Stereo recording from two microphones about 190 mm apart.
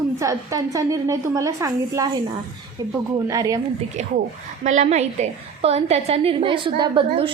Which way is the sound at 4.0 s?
40° right (ahead or behind).